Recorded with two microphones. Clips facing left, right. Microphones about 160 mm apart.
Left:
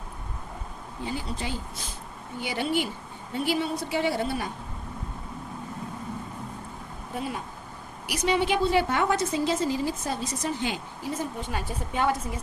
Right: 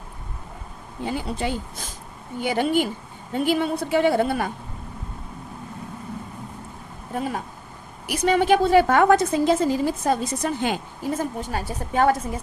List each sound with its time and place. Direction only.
1.0 s a woman's voice: 55° right (ahead or behind)
7.2 s a woman's voice: 50° right (ahead or behind)